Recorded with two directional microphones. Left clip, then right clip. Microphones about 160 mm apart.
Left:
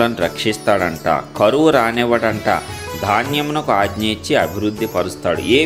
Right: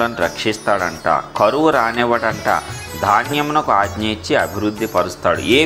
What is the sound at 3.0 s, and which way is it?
Speech, 25° left (ahead or behind).